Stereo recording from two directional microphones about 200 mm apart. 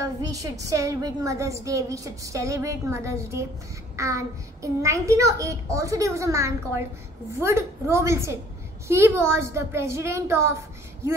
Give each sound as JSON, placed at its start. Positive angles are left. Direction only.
{"t": 0.0, "sound": "a woman's voice", "side_deg": -15}